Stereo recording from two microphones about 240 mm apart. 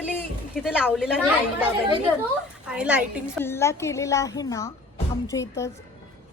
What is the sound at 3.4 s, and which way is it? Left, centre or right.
Speech, centre.